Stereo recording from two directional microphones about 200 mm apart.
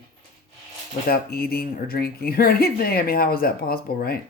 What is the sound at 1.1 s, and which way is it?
Speech, 50° left (ahead or behind).